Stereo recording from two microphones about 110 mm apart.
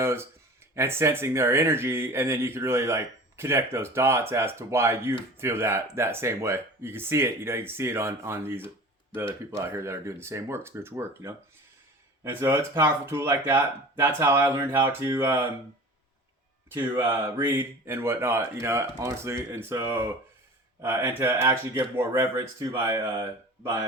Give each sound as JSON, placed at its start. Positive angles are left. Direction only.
{"t": 0.0, "sound": "speech", "side_deg": -25}
{"t": 16.6, "sound": "speech", "side_deg": -20}